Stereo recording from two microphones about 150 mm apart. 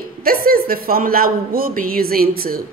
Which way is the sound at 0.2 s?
80° right.